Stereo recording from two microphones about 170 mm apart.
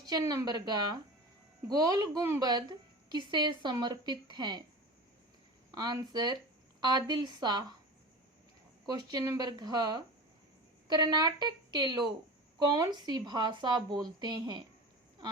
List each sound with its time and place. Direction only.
0.1 s a woman's voice: 20° right (ahead or behind)
5.7 s a woman's voice: 25° right (ahead or behind)
8.9 s a woman's voice: 25° right (ahead or behind)